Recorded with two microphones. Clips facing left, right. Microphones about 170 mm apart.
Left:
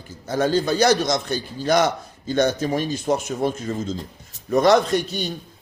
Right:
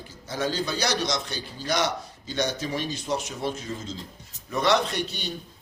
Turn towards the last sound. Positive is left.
turn(degrees=45)  # may be behind; listen again after turning